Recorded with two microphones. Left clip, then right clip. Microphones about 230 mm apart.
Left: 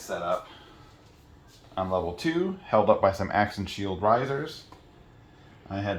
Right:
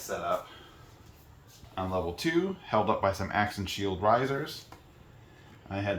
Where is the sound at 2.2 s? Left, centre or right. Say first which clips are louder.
Left 1 dB; centre.